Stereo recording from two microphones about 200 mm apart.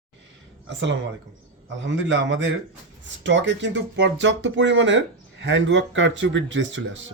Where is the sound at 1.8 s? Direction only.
65° right (ahead or behind).